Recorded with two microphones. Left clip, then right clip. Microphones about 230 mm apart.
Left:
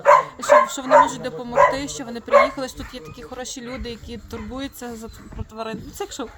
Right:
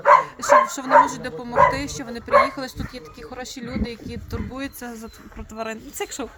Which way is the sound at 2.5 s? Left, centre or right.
Centre.